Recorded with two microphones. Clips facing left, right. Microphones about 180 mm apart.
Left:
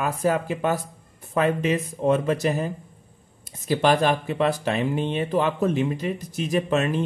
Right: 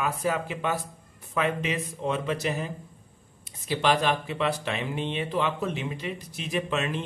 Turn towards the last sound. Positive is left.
turn(degrees=45)  # may be behind; listen again after turning